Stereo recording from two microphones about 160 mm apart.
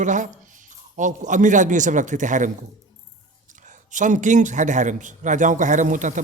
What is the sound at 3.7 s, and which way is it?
A man's voice, 50° right (ahead or behind).